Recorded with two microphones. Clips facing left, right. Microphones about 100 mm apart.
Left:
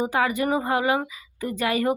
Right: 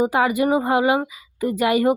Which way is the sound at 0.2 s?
20° right (ahead or behind).